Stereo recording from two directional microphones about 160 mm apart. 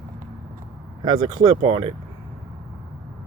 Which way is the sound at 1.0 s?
25° right (ahead or behind).